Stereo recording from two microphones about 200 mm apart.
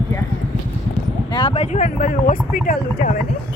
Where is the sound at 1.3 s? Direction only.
30° left (ahead or behind); by 3.2 s 45° left (ahead or behind).